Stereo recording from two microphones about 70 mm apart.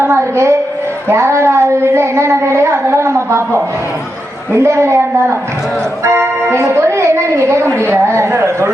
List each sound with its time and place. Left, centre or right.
0.0 s a woman's voice: right
6.1 s speech: right